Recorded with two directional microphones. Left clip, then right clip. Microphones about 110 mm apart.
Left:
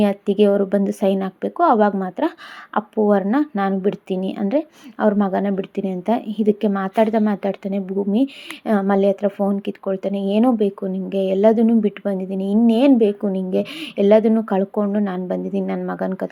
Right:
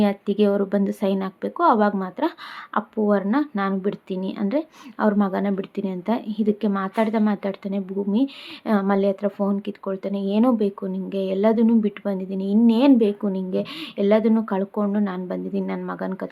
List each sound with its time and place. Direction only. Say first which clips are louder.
0.0 s a woman's voice: left 4 dB; 25° left (ahead or behind)
14.8 s a woman's voice: left 3 dB; 15° left (ahead or behind); by 16.3 s 30° left (ahead or behind)